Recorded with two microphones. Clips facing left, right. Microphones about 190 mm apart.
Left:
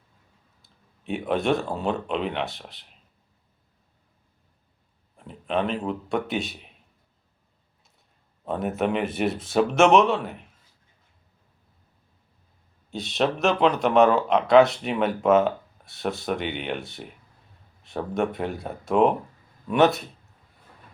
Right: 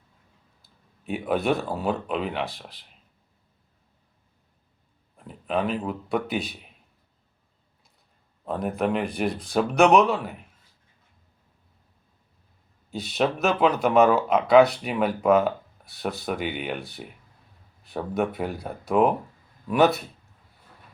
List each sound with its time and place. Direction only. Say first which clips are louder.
1.0 s speech: even; centre (ahead or behind)
5.1 s speech: left 1 dB; centre (ahead or behind)
8.4 s speech: even; centre (ahead or behind)
12.9 s speech: even; centre (ahead or behind)